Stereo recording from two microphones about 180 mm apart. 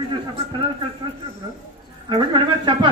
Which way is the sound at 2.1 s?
25° right (ahead or behind).